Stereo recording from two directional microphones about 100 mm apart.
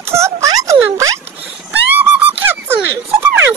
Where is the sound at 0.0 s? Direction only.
30° right (ahead or behind).